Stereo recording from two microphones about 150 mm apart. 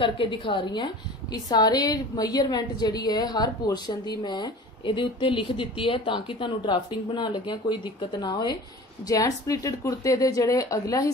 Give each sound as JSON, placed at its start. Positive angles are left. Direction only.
{"t": 0.0, "sound": "a woman's voice", "side_deg": 35}